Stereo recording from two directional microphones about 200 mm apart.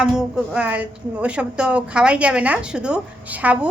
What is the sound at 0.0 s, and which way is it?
A woman's voice, 5° right (ahead or behind).